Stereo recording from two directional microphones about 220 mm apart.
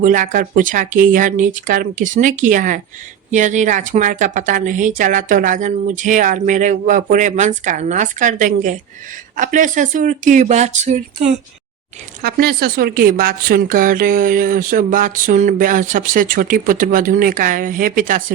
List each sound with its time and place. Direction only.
0.0 s speech: 35° right (ahead or behind)
12.2 s speech: 45° right (ahead or behind)